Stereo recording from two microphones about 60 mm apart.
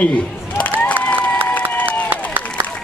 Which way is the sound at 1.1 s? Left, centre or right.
Left.